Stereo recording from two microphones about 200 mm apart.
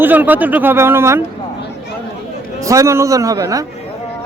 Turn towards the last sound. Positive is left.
turn(degrees=-15)  # may be behind; listen again after turning